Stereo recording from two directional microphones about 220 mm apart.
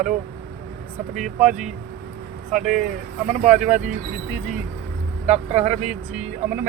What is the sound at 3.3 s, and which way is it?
Speech, 30° right (ahead or behind).